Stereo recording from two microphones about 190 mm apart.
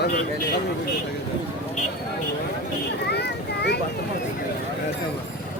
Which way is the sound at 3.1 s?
60° left (ahead or behind).